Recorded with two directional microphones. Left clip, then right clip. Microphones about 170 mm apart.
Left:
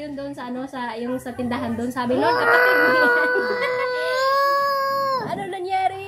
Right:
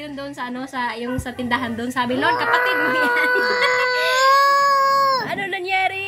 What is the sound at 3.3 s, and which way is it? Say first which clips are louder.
Speech: right 3 dB; 20° left (ahead or behind).